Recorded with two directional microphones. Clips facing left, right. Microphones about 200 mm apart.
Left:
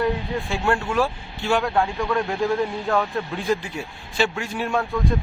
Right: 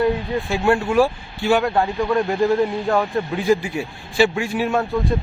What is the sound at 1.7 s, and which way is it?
Speech, 20° right (ahead or behind).